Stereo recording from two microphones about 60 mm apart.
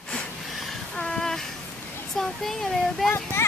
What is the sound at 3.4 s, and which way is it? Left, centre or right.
Speech, left.